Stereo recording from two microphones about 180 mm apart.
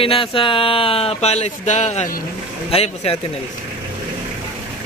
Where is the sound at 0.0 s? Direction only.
30° left (ahead or behind); by 2.2 s 45° left (ahead or behind).